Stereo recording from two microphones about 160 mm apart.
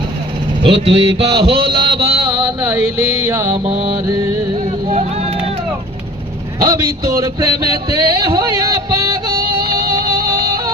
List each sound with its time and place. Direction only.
0.6 s speech: 35° right (ahead or behind)
1.3 s a sound: 30° right (ahead or behind)
3.2 s music: 20° right (ahead or behind)
3.5 s speech: 35° right (ahead or behind)
4.1 s music: 25° right (ahead or behind)
4.9 s vehicle: 45° right (ahead or behind)
6.6 s a man's voice: 20° right (ahead or behind)
7.9 s a sound: 25° right (ahead or behind)